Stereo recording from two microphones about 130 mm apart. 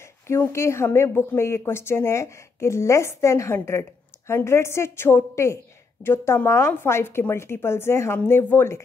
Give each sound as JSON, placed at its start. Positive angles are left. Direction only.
{"t": 0.0, "sound": "a woman's voice", "side_deg": 20}